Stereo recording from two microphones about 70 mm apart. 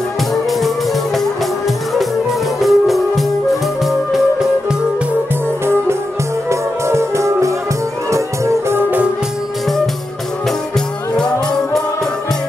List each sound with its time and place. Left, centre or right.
0.3 s music: centre
2.6 s music: centre
6.5 s music: right
11.1 s music: centre